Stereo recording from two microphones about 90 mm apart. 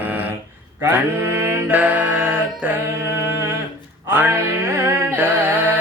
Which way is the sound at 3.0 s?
30° right (ahead or behind).